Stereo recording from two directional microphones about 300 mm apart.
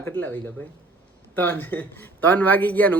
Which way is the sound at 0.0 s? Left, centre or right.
Centre.